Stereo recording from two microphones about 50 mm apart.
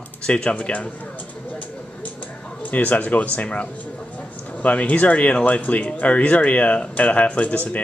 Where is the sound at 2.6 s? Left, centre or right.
Left.